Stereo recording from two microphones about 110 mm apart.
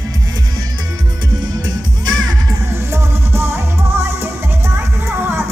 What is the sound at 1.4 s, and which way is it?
Music, 40° right (ahead or behind).